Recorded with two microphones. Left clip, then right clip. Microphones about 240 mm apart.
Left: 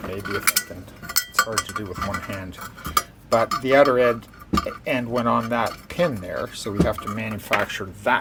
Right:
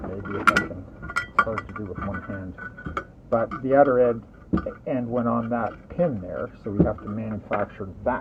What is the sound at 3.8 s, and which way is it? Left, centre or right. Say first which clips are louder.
Speech: right 1 dB; left.